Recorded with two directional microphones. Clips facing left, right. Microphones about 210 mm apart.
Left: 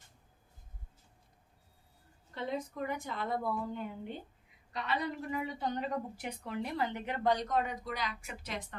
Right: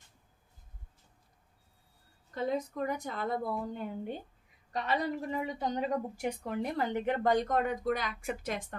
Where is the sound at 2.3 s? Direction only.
40° right (ahead or behind).